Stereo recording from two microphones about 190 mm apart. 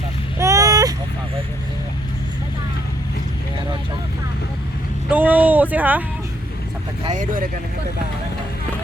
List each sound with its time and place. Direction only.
0.3 s vehicle: 15° right (ahead or behind)
5.1 s a sound: 10° right (ahead or behind)
7.1 s speech: 45° right (ahead or behind)